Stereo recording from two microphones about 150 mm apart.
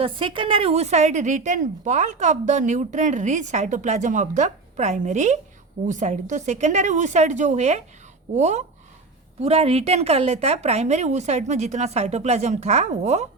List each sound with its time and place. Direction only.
0.0 s a woman's voice: 35° right (ahead or behind)